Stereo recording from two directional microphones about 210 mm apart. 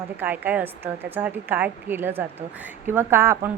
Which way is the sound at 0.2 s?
10° right (ahead or behind).